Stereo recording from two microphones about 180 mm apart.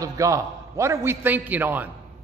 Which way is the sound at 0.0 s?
20° right (ahead or behind).